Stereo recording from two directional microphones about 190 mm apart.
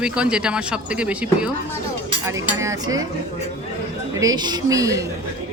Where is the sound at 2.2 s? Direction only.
15° right (ahead or behind).